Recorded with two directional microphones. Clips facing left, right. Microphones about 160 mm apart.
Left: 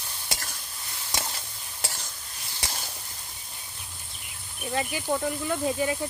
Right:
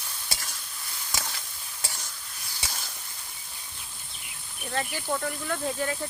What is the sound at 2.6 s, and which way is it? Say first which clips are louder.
Sizzle: left 3 dB; 35° left (ahead or behind).